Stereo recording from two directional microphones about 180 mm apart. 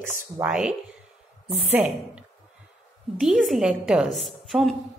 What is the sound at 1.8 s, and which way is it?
Speech, 10° right (ahead or behind).